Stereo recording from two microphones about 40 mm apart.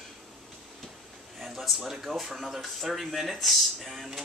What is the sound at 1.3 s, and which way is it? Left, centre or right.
Speech, centre.